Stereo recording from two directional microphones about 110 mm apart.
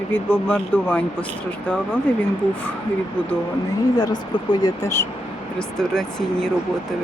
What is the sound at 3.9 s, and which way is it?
Speech, 40° left (ahead or behind).